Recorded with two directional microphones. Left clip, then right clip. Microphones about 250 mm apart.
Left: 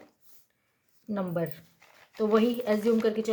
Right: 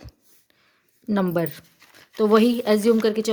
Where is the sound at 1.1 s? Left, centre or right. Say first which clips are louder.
Right 8 dB; right.